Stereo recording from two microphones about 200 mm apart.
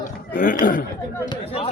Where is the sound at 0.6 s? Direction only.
45° left (ahead or behind).